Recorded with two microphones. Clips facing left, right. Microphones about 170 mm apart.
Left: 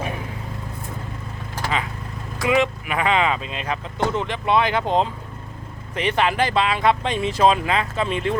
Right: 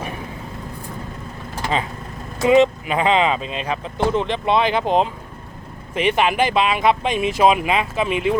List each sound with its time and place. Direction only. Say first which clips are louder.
2.4 s speech: right 6 dB; 25° right (ahead or behind)